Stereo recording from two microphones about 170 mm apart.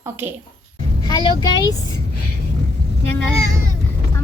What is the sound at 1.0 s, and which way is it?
Speech, 25° left (ahead or behind).